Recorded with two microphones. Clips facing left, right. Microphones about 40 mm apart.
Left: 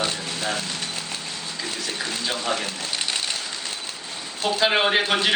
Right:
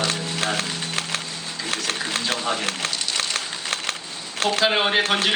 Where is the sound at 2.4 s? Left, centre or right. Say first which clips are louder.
Right 1 dB; centre.